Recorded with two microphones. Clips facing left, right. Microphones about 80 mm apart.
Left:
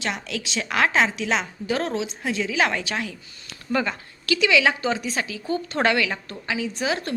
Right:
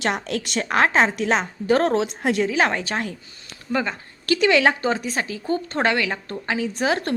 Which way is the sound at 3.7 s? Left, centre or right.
Right.